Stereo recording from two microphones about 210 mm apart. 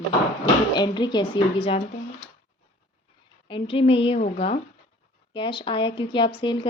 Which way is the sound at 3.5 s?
25° left (ahead or behind).